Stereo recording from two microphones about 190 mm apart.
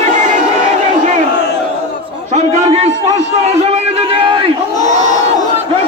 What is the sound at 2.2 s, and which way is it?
Speech, 35° right (ahead or behind).